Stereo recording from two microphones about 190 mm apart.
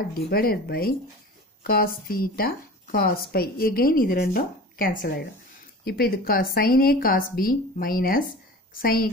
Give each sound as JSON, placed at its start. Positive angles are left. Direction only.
{"t": 0.1, "sound": "speech", "side_deg": 50}